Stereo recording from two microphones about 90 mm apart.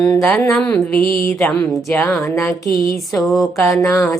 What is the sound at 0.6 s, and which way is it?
Speech, 15° left (ahead or behind).